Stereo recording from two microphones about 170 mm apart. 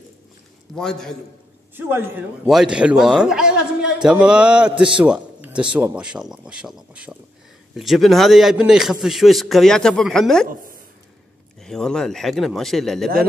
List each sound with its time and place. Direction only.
0.7 s speech: 5° left (ahead or behind)
1.8 s a man's voice: 10° right (ahead or behind)
5.0 s a sound: 5° right (ahead or behind)
5.8 s speech: 5° right (ahead or behind)
10.5 s speech: 55° right (ahead or behind)
11.6 s speech: 5° left (ahead or behind)